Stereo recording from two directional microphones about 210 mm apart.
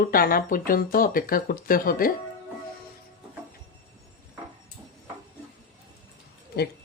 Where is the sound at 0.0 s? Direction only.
45° left (ahead or behind).